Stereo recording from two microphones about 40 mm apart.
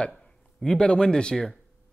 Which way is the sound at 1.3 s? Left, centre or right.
Centre.